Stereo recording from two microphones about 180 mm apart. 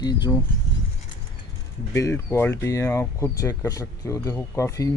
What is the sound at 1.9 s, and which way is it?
Speech, 15° left (ahead or behind).